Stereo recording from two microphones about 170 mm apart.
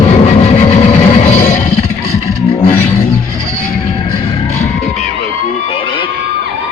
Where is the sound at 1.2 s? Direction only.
45° left (ahead or behind).